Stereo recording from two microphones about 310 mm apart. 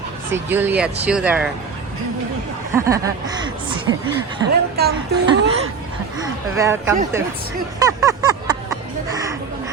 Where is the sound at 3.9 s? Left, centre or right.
Right.